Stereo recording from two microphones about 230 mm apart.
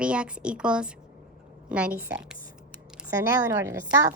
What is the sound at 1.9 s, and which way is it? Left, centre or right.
Speech, centre.